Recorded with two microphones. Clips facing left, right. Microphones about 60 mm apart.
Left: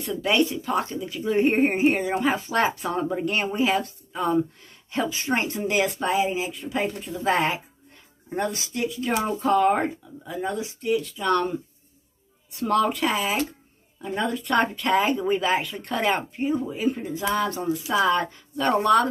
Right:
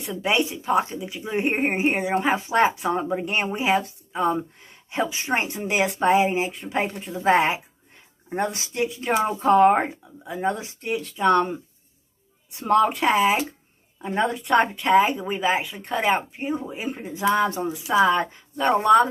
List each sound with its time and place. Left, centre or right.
0.0 s speech: right
12.5 s speech: right
14.9 s speech: centre
16.4 s speech: right
17.6 s speech: centre
17.9 s speech: right